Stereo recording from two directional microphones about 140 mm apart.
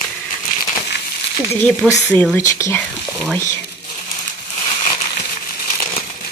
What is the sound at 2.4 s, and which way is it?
Speech, 20° left (ahead or behind).